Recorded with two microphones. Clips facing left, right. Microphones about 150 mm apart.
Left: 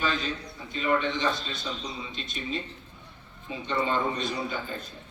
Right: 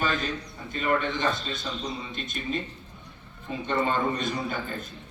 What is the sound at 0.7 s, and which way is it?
Mantra, 50° right (ahead or behind).